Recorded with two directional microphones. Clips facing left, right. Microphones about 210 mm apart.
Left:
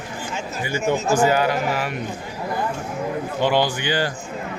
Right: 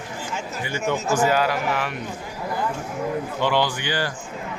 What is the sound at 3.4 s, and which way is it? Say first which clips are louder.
Speech: left 3 dB; 15° left (ahead or behind).